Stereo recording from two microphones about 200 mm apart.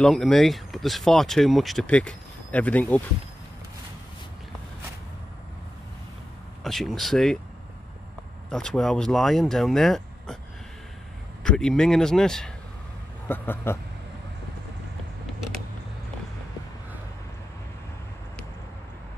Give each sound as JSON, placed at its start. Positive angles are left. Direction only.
{"t": 0.0, "sound": "speech", "side_deg": 0}
{"t": 6.6, "sound": "speech", "side_deg": 0}
{"t": 8.5, "sound": "speech", "side_deg": 5}
{"t": 11.4, "sound": "speech", "side_deg": 5}